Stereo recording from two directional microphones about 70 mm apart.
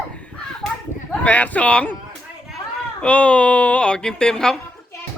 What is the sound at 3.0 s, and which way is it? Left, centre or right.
A woman's voice, centre.